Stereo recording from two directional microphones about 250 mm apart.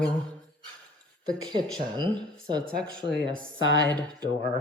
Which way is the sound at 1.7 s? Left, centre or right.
Centre.